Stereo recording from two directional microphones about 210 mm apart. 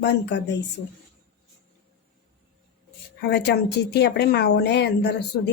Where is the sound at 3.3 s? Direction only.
50° left (ahead or behind).